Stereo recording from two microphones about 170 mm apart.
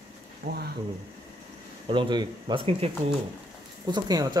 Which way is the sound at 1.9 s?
30° right (ahead or behind).